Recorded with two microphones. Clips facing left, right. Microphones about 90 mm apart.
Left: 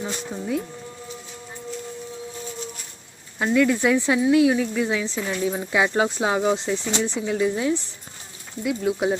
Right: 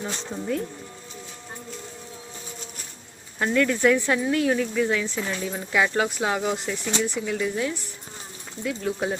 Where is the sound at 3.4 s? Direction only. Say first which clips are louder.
Left 2 dB; 10° left (ahead or behind).